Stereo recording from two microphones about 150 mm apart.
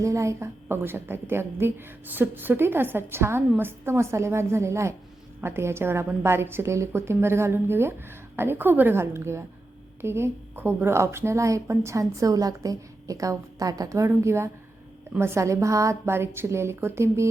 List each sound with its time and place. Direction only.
0.0 s a woman's voice: 20° right (ahead or behind)